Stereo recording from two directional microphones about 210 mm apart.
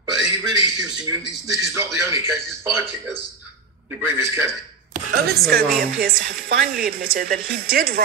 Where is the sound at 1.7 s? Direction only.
15° right (ahead or behind).